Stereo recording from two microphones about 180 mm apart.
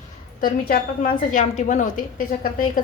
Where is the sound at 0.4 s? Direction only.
55° left (ahead or behind).